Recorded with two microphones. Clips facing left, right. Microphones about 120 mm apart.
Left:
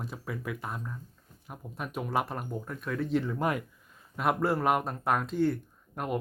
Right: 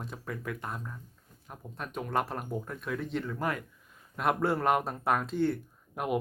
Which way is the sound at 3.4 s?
15° left (ahead or behind).